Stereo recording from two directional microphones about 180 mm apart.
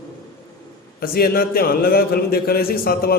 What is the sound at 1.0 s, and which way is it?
A man's voice, 55° left (ahead or behind).